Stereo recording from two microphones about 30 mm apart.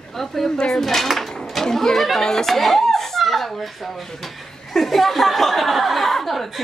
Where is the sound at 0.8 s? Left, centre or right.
Centre.